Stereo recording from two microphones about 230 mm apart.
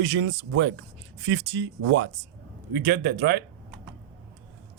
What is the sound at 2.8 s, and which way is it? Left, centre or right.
Speech, right.